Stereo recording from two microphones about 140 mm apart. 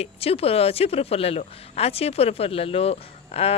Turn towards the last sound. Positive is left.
turn(degrees=45)  # may be behind; listen again after turning